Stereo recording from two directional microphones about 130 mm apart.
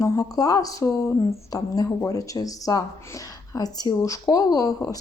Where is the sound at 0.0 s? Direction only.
25° left (ahead or behind).